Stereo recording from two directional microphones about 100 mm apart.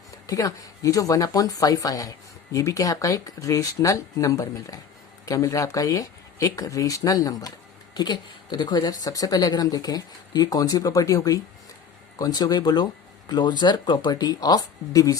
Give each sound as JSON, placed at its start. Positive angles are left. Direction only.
{"t": 0.3, "sound": "speech", "side_deg": 35}